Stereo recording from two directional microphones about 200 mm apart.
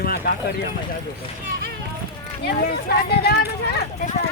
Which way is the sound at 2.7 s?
50° left (ahead or behind).